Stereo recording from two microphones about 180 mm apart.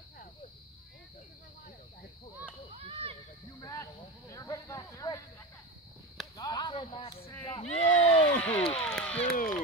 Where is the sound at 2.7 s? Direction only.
30° right (ahead or behind).